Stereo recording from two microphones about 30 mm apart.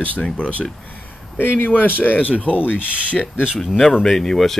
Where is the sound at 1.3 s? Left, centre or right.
Left.